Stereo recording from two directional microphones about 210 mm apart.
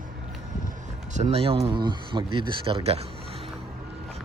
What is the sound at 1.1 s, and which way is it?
Speech, 30° right (ahead or behind).